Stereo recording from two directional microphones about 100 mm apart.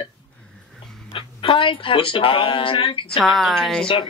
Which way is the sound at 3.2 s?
Centre (ahead or behind).